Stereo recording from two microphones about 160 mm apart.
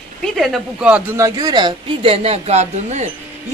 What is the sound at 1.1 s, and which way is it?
A woman's voice, 25° right (ahead or behind).